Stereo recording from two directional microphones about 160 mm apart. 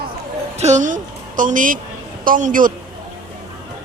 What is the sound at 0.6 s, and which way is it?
A woman's voice, 50° right (ahead or behind).